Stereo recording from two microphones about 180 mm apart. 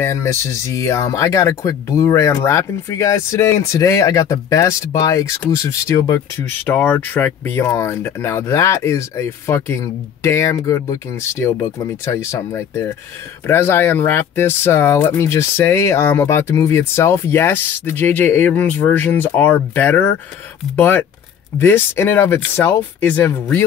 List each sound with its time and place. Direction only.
0.0 s speech: 15° left (ahead or behind)